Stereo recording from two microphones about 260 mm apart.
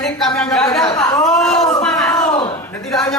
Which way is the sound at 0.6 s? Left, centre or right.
Centre.